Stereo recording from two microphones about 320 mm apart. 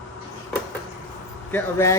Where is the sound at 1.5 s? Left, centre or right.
Centre.